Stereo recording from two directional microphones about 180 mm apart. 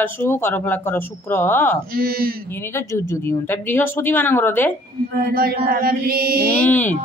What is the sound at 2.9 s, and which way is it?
Speech, 15° left (ahead or behind).